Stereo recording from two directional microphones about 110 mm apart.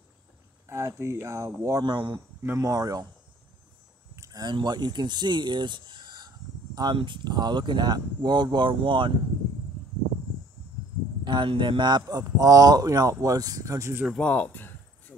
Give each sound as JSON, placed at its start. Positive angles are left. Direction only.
{"t": 0.7, "sound": "speech", "side_deg": -25}
{"t": 2.4, "sound": "speech", "side_deg": -20}
{"t": 2.7, "sound": "speech", "side_deg": -35}
{"t": 4.1, "sound": "speech", "side_deg": -30}
{"t": 11.2, "sound": "speech", "side_deg": -45}
{"t": 14.1, "sound": "a sound", "side_deg": 10}